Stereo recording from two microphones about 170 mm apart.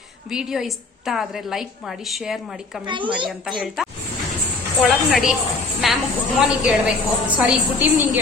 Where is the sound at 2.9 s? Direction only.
30° right (ahead or behind).